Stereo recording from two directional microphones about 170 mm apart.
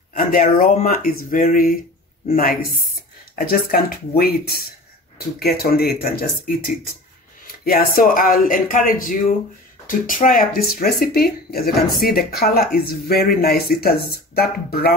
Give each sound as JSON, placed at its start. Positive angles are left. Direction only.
{"t": 0.1, "sound": "speech", "side_deg": 50}
{"t": 7.9, "sound": "speech", "side_deg": 55}